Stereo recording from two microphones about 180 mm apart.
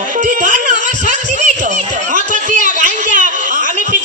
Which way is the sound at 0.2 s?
45° right (ahead or behind).